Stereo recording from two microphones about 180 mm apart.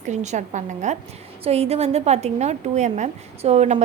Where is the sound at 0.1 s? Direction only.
40° right (ahead or behind).